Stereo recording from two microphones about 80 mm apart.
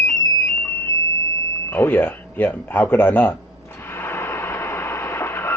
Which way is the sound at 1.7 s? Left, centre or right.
Left.